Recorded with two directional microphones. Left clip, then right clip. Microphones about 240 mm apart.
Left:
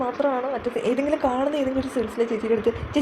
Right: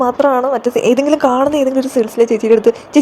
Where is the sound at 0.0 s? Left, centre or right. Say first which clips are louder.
Right 11 dB; right.